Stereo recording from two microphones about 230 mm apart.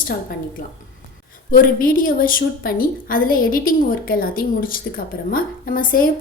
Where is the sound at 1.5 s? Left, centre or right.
Left.